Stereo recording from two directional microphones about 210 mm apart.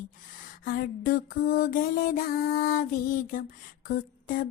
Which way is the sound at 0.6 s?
45° left (ahead or behind).